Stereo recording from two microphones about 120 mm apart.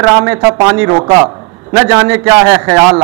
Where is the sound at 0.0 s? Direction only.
20° right (ahead or behind).